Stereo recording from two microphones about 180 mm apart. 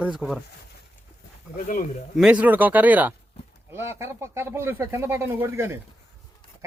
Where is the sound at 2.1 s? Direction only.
5° right (ahead or behind).